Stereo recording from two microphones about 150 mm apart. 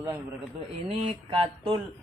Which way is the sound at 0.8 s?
40° right (ahead or behind).